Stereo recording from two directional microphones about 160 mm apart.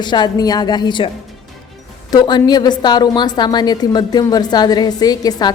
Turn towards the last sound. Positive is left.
turn(degrees=25)  # may be behind; listen again after turning